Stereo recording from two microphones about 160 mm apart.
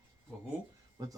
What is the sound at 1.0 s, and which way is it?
Speech, 25° right (ahead or behind).